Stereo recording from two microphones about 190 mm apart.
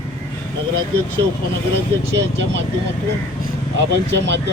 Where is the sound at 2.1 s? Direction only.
65° right (ahead or behind).